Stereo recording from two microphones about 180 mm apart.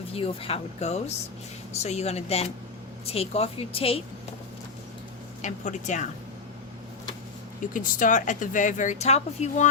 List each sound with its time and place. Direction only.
0.1 s speech: 35° left (ahead or behind)
5.4 s speech: 40° left (ahead or behind)
7.7 s speech: 45° left (ahead or behind)